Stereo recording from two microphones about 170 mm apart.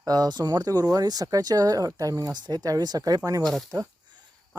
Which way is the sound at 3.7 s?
25° right (ahead or behind).